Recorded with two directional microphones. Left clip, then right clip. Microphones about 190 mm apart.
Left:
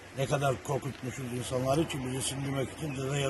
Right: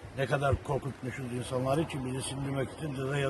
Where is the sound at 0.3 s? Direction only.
5° left (ahead or behind).